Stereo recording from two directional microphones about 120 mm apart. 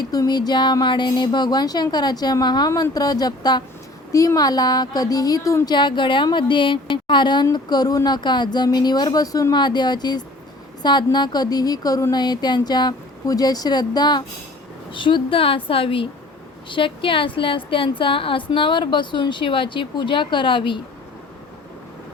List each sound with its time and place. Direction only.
0.0 s speech: 35° left (ahead or behind)
5.7 s a woman's voice: 40° left (ahead or behind)